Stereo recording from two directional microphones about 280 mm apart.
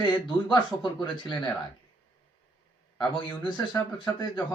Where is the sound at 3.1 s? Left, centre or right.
Centre.